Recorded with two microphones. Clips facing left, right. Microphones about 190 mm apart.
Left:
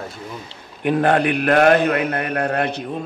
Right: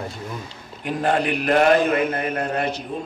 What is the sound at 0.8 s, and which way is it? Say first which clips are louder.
A man's voice: left 5 dB; 60° left (ahead or behind).